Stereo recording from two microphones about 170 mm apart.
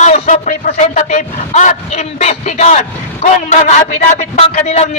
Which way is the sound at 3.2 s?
45° left (ahead or behind).